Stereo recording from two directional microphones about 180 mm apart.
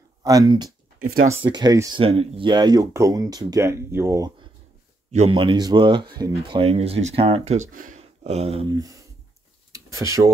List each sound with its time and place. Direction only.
0.2 s speech: 20° right (ahead or behind)
1.0 s speech: 55° right (ahead or behind)
1.4 s speech: 20° right (ahead or behind)
5.1 s speech: 35° right (ahead or behind)
8.0 s a sound: 35° right (ahead or behind)
8.6 s speech: 20° right (ahead or behind)
9.7 s a sound: 15° right (ahead or behind)